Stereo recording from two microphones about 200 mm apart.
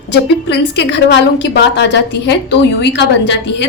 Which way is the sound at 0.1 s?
60° left (ahead or behind).